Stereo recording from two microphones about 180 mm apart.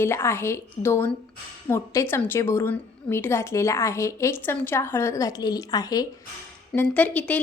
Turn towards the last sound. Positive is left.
turn(degrees=10)  # may be behind; listen again after turning